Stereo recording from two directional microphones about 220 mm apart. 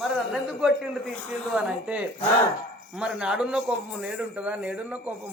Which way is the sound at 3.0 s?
5° right (ahead or behind).